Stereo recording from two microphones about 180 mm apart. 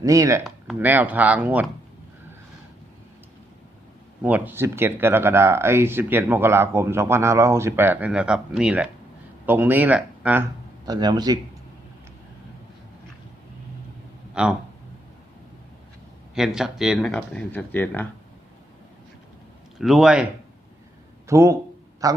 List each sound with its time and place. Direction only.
0.0 s speech: 20° right (ahead or behind)
0.4 s speech: 5° right (ahead or behind)
4.2 s speech: 10° right (ahead or behind)
10.8 s speech: 25° right (ahead or behind)
14.4 s speech: 5° right (ahead or behind)
16.3 s speech: 5° right (ahead or behind)
19.8 s speech: centre (ahead or behind)
21.2 s speech: 15° right (ahead or behind)